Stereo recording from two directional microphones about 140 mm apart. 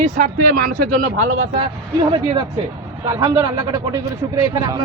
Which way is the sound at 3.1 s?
25° right (ahead or behind).